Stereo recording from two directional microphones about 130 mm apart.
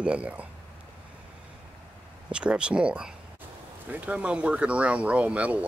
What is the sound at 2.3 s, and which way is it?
Speech, 5° right (ahead or behind).